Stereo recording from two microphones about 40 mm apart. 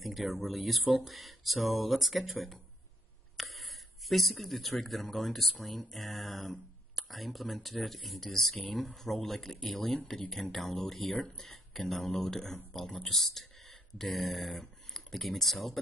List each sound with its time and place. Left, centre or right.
0.0 s speech: centre
11.1 s speech: left
11.5 s speech: centre